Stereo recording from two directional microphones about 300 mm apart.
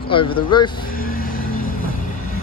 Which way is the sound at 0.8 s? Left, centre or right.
Left.